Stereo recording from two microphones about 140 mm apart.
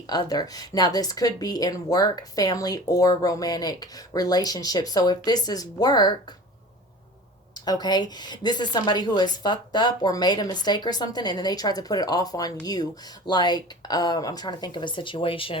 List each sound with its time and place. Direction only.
0.1 s a woman's voice: 30° left (ahead or behind)
7.6 s a woman's voice: 30° left (ahead or behind)